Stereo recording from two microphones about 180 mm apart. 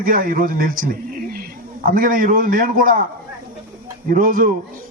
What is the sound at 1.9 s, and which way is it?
A man's voice, 50° right (ahead or behind).